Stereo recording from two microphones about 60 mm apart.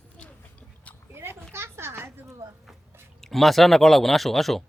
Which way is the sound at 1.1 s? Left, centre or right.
Right.